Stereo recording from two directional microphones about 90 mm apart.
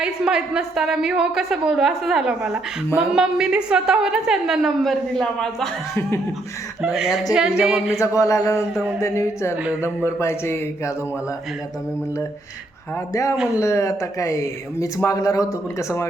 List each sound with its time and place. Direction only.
0.0 s a woman's voice: 10° right (ahead or behind)
6.8 s a woman's voice: 5° right (ahead or behind)
7.9 s speech: 35° left (ahead or behind)
13.6 s speech: 35° left (ahead or behind)